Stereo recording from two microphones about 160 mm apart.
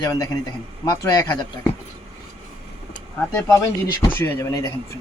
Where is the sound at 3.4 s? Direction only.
20° left (ahead or behind).